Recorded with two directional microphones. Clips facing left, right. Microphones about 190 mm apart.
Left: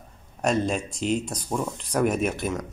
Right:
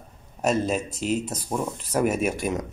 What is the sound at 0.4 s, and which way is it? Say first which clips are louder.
Speech: right 1 dB; 5° right (ahead or behind).